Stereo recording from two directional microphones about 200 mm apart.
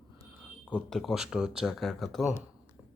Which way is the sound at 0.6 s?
5° left (ahead or behind).